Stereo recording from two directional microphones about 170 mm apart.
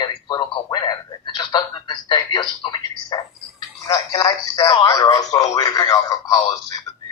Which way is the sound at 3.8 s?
20° left (ahead or behind).